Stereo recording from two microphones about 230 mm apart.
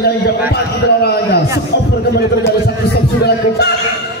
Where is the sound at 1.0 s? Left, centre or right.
Left.